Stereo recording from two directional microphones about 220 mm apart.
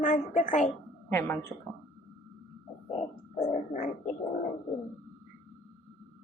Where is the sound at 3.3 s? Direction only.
35° left (ahead or behind).